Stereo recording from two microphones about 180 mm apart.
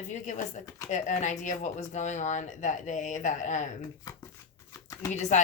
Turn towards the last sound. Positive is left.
turn(degrees=40)  # may be behind; listen again after turning